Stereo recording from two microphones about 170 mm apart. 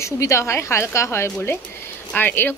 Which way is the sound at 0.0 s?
15° left (ahead or behind).